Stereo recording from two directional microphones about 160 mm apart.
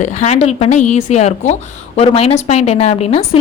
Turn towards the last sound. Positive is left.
turn(degrees=40)  # may be behind; listen again after turning